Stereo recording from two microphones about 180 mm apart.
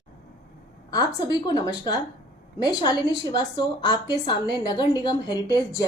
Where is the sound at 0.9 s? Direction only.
20° left (ahead or behind).